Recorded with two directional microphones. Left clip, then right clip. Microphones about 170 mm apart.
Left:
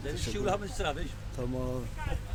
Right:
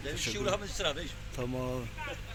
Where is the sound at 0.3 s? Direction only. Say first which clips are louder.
Left 2 dB; 60° left (ahead or behind).